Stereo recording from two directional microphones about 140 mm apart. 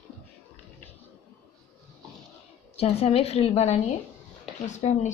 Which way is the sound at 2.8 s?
45° left (ahead or behind).